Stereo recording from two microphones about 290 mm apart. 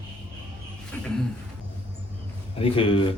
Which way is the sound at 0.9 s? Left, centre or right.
Centre.